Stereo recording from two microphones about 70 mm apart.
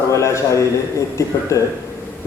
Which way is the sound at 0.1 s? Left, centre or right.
Left.